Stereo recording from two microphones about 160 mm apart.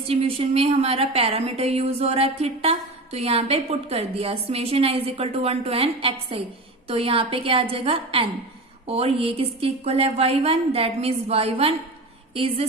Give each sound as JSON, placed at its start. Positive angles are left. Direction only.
{"t": 0.0, "sound": "a woman's voice", "side_deg": -35}